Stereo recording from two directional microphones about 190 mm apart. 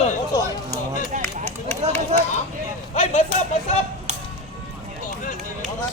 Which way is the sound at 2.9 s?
40° left (ahead or behind).